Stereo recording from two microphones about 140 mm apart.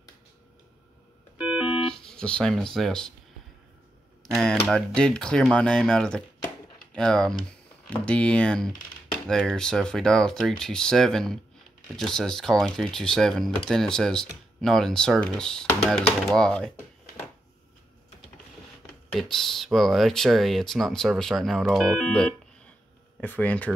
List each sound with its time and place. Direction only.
1.4 s music: 5° right (ahead or behind)
4.4 s speech: 5° left (ahead or behind)
19.1 s speech: centre (ahead or behind)